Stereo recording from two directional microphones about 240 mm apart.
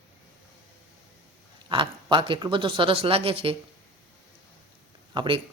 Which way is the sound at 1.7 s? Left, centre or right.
Right.